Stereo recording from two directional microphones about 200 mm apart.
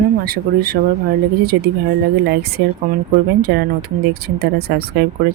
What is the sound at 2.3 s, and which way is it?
Speech, 50° right (ahead or behind).